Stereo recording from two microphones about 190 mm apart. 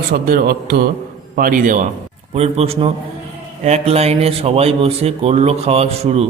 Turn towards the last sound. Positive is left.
turn(degrees=-35)  # may be behind; listen again after turning